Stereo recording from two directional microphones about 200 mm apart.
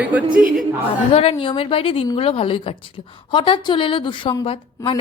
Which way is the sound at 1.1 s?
30° left (ahead or behind).